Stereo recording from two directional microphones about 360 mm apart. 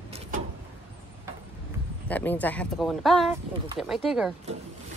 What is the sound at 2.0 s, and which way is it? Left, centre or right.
A woman's voice, centre.